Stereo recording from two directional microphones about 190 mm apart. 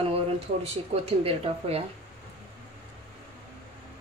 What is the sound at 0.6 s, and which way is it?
Speech, 30° right (ahead or behind).